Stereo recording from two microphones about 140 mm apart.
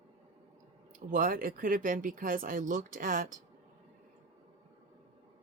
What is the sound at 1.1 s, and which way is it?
Speech, 75° right (ahead or behind).